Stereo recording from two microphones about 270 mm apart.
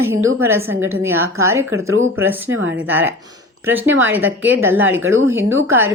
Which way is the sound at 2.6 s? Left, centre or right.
Right.